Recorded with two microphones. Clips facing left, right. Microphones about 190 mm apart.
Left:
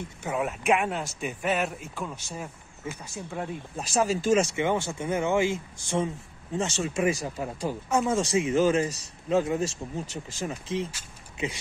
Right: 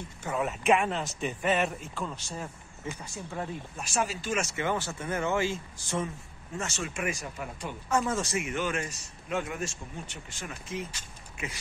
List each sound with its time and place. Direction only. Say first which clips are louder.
0.2 s speech: left 1 dB; 5° left (ahead or behind)
3.7 s speech: left 7 dB; 35° left (ahead or behind)
4.6 s speech: left 4 dB; 20° left (ahead or behind)
6.5 s speech: left 7 dB; 30° left (ahead or behind)
7.9 s speech: left 2 dB; 15° left (ahead or behind)
8.4 s speech: left 9 dB; 30° left (ahead or behind)